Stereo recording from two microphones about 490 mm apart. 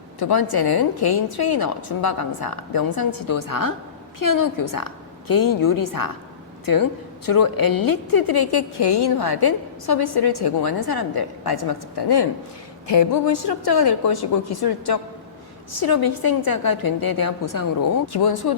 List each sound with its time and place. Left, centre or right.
0.2 s a woman's voice: left
7.3 s a woman's voice: left